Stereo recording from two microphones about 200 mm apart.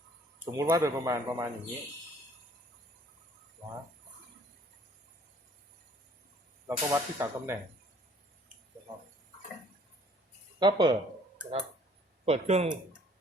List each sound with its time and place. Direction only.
0.5 s speech: 15° right (ahead or behind)
6.7 s speech: 15° right (ahead or behind)
10.6 s speech: 20° right (ahead or behind)
12.2 s speech: 30° right (ahead or behind)